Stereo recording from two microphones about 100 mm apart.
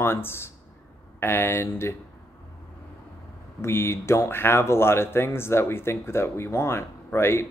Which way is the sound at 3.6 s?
25° left (ahead or behind).